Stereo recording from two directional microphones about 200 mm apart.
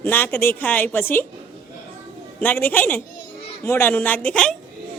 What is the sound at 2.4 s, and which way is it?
A woman's voice, 10° left (ahead or behind).